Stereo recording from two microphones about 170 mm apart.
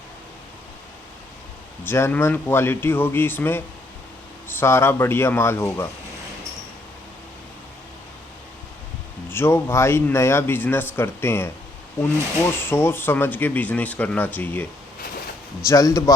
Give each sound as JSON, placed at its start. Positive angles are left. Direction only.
{"t": 1.8, "sound": "speech", "side_deg": 15}
{"t": 9.3, "sound": "a man's voice", "side_deg": 15}